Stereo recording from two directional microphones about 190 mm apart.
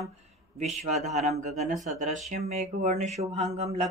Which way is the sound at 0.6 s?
35° right (ahead or behind).